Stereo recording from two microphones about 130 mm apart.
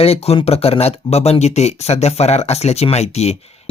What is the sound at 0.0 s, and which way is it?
Speech, 50° left (ahead or behind).